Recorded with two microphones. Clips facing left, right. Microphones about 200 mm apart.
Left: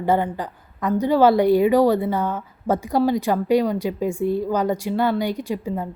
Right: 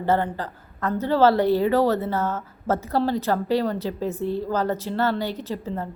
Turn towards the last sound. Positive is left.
turn(degrees=10)  # may be behind; listen again after turning